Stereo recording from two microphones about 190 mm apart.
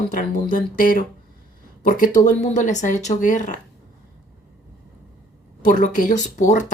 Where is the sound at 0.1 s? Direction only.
45° left (ahead or behind).